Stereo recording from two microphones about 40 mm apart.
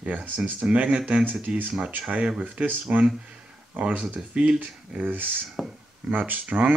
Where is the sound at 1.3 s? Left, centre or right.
Centre.